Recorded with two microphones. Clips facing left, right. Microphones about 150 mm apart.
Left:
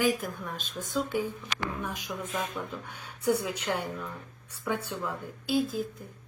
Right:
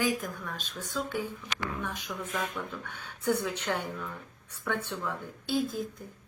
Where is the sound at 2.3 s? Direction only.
25° left (ahead or behind).